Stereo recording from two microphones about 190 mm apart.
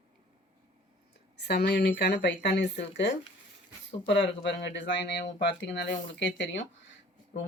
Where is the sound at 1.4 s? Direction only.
60° left (ahead or behind).